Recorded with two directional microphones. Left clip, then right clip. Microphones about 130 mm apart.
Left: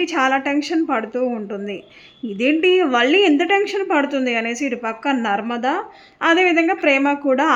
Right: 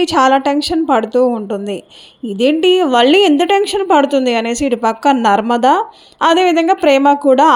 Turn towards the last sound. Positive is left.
turn(degrees=-40)  # may be behind; listen again after turning